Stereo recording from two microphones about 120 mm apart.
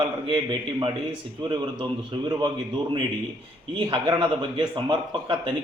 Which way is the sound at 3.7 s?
40° right (ahead or behind).